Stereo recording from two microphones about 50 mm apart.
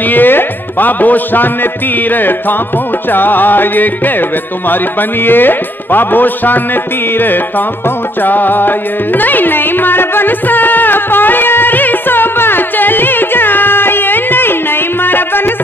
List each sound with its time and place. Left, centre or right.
0.0 s music: left